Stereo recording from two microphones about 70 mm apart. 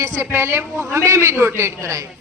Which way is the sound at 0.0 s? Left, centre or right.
Right.